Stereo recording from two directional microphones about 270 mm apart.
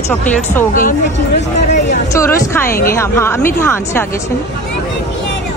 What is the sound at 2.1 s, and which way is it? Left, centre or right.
Speech, centre.